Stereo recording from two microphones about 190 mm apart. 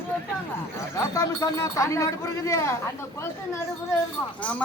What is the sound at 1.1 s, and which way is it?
A woman's voice, 20° left (ahead or behind).